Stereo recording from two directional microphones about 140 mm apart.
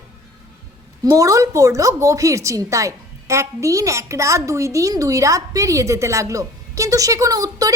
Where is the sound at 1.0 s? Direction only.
25° right (ahead or behind).